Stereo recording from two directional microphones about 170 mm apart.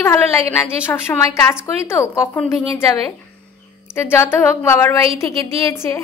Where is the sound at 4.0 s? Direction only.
15° left (ahead or behind).